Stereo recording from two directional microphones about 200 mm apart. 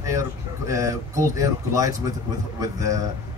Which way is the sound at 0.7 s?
15° right (ahead or behind).